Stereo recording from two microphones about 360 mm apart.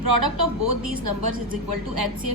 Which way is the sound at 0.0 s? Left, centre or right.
Right.